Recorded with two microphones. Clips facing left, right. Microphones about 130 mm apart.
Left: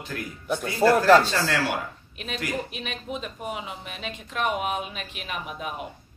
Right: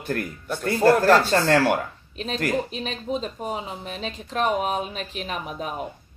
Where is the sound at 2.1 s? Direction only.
35° right (ahead or behind).